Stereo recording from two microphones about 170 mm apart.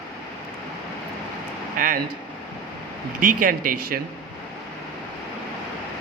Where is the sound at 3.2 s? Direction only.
55° right (ahead or behind).